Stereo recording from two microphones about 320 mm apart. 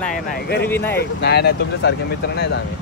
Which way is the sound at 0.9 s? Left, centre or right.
Left.